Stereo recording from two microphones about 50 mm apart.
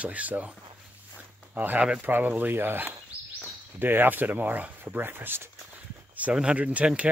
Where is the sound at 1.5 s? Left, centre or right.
Right.